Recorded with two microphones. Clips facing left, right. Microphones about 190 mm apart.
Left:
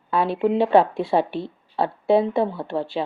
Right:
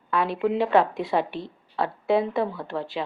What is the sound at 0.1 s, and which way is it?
Speech, 30° left (ahead or behind).